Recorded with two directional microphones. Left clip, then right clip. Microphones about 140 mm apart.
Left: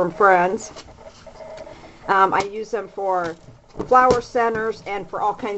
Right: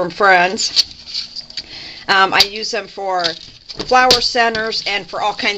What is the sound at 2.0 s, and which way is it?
Speech, 35° right (ahead or behind).